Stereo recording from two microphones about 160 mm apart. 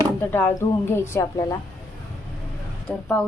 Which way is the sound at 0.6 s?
15° left (ahead or behind).